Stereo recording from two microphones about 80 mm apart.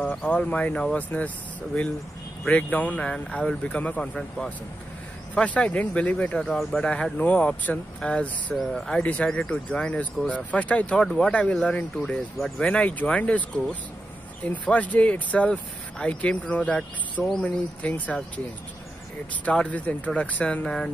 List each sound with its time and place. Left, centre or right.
0.0 s speech: centre
2.4 s speech: centre
19.4 s speech: centre